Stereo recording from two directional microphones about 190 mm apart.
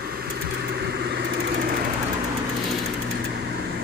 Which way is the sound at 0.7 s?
60° right (ahead or behind).